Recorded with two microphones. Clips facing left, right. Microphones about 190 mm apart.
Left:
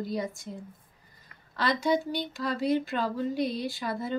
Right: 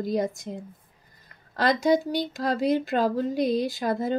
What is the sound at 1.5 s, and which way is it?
Speech, 45° right (ahead or behind).